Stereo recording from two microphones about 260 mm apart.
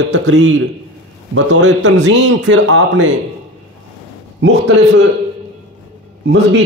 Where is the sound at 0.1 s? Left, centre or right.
Right.